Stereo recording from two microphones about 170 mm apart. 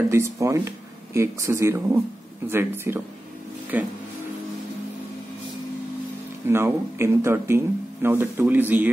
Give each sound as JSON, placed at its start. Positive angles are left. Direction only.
{"t": 0.1, "sound": "speech", "side_deg": -15}
{"t": 6.5, "sound": "speech", "side_deg": -15}